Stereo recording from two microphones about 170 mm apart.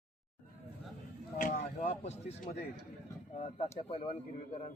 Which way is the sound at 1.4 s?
55° left (ahead or behind).